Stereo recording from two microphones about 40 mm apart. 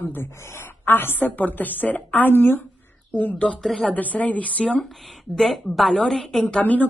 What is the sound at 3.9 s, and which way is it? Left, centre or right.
Speech, left.